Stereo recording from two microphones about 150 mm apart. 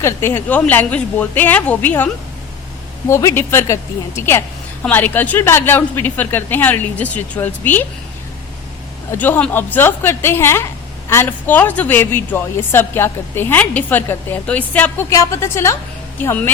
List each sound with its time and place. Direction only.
0.0 s a woman's voice: 15° left (ahead or behind)
3.1 s a woman's voice: 20° left (ahead or behind)
9.1 s a woman's voice: 10° left (ahead or behind)